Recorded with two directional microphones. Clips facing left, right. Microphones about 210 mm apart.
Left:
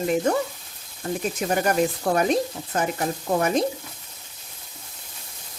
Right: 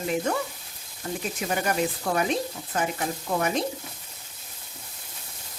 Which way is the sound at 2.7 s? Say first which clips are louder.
Left 3 dB; 45° left (ahead or behind).